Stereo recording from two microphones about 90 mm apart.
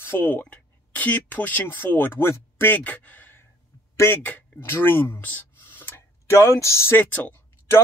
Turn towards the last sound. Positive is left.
turn(degrees=20)  # may be behind; listen again after turning